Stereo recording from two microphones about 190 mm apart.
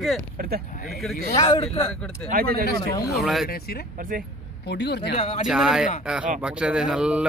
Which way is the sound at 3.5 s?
55° left (ahead or behind).